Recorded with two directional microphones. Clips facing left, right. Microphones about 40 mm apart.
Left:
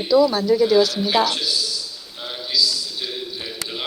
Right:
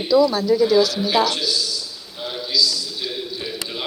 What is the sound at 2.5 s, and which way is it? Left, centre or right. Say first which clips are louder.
Speech: right 1 dB; left.